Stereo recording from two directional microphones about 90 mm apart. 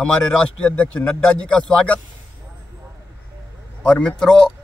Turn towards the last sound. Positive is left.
turn(degrees=10)  # may be behind; listen again after turning